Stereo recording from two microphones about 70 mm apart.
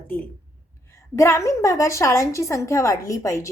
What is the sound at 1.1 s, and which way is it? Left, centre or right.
A woman's voice, left.